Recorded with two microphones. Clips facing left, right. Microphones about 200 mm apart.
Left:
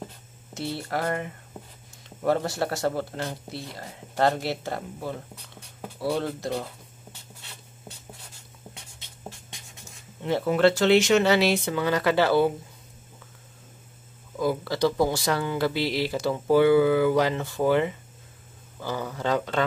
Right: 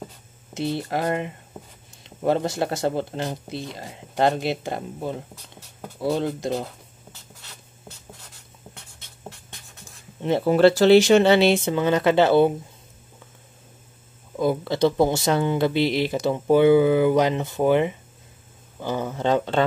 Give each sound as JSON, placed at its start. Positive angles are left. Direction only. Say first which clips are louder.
{"t": 0.6, "sound": "speech", "louder": "right 4 dB", "side_deg": -20}
{"t": 10.2, "sound": "speech", "louder": "right 4 dB", "side_deg": -25}
{"t": 14.4, "sound": "speech", "louder": "right 4 dB", "side_deg": -25}